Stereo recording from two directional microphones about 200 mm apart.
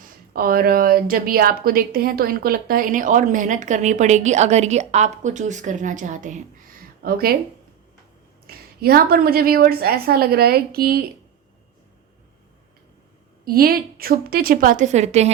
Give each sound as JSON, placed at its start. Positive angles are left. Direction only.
{"t": 0.3, "sound": "a woman's voice", "side_deg": -45}
{"t": 7.0, "sound": "a woman's voice", "side_deg": -50}
{"t": 8.4, "sound": "a woman's voice", "side_deg": -50}
{"t": 13.4, "sound": "a woman's voice", "side_deg": -50}